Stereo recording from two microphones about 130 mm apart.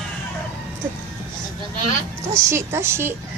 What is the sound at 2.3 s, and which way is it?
Speech, 20° right (ahead or behind).